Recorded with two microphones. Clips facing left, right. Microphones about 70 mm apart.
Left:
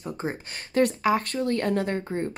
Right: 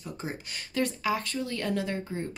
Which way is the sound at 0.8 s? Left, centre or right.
Left.